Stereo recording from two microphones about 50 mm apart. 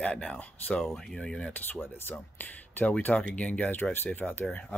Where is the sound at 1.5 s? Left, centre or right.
Left.